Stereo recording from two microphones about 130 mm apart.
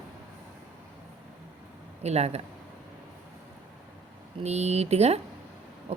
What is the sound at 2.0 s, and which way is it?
Speech, 55° right (ahead or behind).